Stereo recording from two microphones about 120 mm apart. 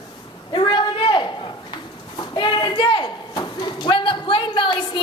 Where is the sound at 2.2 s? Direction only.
40° left (ahead or behind).